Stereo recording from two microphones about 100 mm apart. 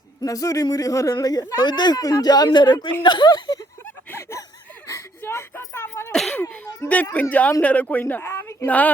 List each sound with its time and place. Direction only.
0.2 s speech: 35° left (ahead or behind)
4.1 s a sound: 30° left (ahead or behind)
4.9 s speech: 30° left (ahead or behind)
6.1 s speech: 5° left (ahead or behind)
6.7 s speech: 15° left (ahead or behind)